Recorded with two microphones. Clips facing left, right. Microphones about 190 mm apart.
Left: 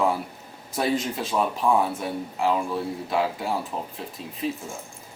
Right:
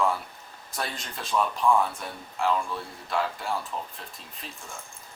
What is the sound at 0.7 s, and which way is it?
Speech, 5° left (ahead or behind).